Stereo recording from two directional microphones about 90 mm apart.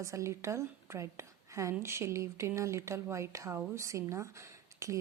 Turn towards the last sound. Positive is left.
turn(degrees=-35)  # may be behind; listen again after turning